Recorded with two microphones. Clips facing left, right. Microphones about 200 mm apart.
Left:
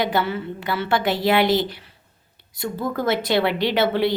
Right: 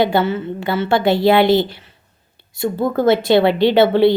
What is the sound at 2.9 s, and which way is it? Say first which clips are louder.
A woman's voice: right 8 dB; 25° right (ahead or behind).